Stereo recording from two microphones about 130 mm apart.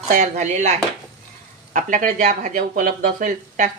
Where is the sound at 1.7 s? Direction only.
85° right.